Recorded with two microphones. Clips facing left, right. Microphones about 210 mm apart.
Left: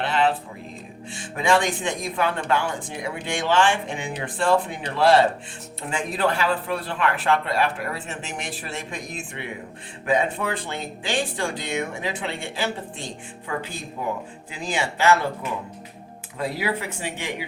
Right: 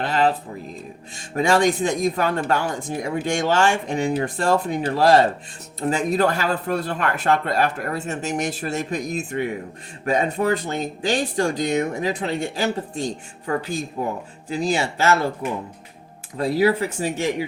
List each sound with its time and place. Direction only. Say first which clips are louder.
0.0 s a sound: right 2 dB; 40° right (ahead or behind)
1.1 s speech: right 2 dB; 40° right (ahead or behind)
16.4 s speech: right 8 dB; 40° right (ahead or behind)